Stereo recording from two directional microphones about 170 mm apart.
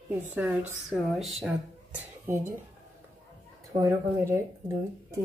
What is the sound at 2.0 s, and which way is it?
Speech, 15° right (ahead or behind).